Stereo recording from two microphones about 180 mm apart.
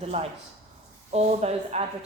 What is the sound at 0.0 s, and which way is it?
A woman's voice, 35° right (ahead or behind).